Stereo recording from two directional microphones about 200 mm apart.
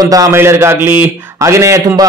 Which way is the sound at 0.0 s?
15° right (ahead or behind).